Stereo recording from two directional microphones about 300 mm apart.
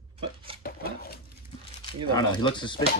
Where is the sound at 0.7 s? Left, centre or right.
Left.